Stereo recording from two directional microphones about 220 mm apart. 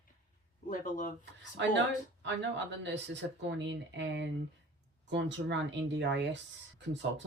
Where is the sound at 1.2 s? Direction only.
55° right (ahead or behind).